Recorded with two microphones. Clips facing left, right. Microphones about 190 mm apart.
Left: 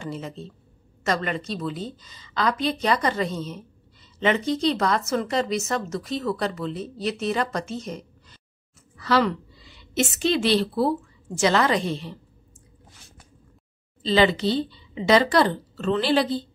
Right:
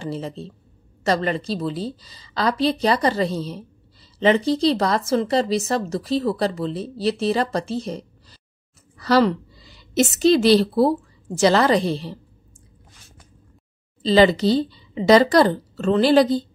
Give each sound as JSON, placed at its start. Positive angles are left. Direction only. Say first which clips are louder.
{"t": 0.0, "sound": "a woman's voice", "louder": "right 4 dB", "side_deg": -35}
{"t": 14.0, "sound": "a woman's voice", "louder": "right 5 dB", "side_deg": -40}